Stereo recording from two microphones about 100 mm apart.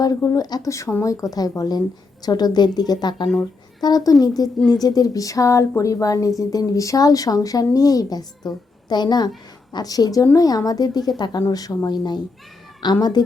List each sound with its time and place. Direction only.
0.0 s a woman's voice: 35° left (ahead or behind)